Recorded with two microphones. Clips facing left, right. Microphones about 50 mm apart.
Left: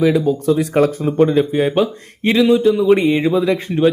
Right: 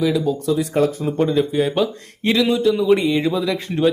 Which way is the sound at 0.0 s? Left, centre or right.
Left.